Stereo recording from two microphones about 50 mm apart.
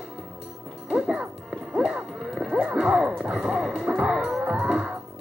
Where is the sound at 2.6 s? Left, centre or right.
Centre.